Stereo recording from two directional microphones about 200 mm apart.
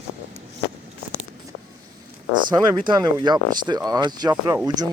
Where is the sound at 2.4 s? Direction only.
20° right (ahead or behind).